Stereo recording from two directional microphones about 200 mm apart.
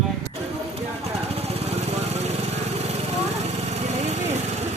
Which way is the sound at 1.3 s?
30° right (ahead or behind).